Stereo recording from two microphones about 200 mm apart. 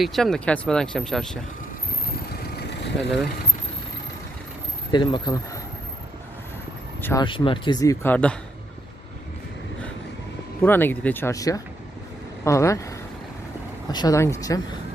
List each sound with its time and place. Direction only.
0.0 s speech: centre (ahead or behind)
3.0 s speech: centre (ahead or behind)
4.9 s speech: 20° left (ahead or behind)
7.0 s speech: 15° left (ahead or behind)
10.6 s speech: 10° left (ahead or behind)